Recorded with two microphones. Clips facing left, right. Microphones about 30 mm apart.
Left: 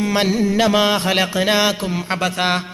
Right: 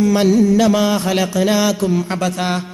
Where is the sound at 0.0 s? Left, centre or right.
Left.